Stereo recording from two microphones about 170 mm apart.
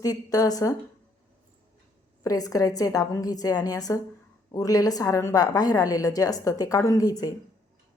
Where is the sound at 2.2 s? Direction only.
20° left (ahead or behind).